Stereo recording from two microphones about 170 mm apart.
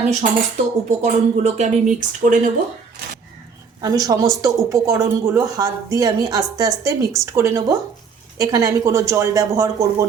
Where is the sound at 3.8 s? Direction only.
20° right (ahead or behind).